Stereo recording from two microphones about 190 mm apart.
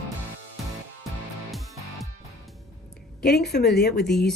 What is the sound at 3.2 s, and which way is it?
Speech, 60° left (ahead or behind).